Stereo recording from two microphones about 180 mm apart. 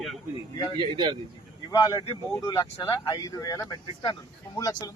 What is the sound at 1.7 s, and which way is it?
Speech, 20° left (ahead or behind).